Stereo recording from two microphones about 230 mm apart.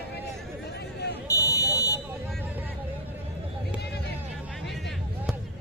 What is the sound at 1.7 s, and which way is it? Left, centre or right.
Vehicle, centre.